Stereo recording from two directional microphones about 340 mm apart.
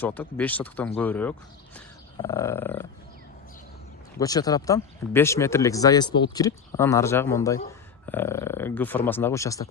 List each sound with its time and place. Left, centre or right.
0.0 s speech: centre
4.2 s speech: centre